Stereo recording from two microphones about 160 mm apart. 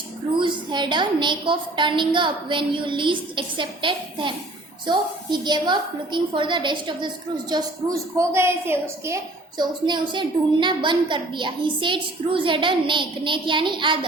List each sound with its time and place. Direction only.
0.3 s a woman's voice: 30° right (ahead or behind)